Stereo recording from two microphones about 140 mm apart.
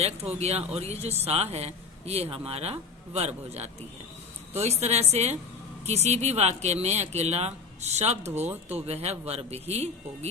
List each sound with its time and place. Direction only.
0.0 s speech: 50° right (ahead or behind)